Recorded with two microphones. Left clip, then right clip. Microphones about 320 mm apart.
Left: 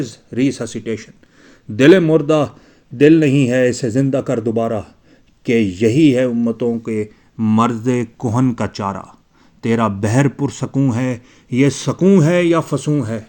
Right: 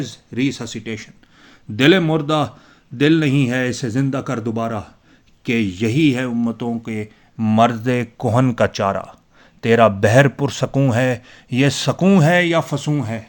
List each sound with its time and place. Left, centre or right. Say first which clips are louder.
0.0 s speech: left 3 dB; centre